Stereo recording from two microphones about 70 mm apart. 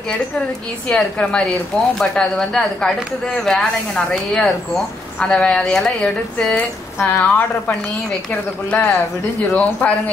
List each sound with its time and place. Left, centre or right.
0.8 s speech: centre